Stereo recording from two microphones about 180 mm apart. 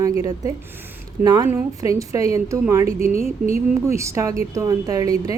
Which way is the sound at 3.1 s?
35° left (ahead or behind).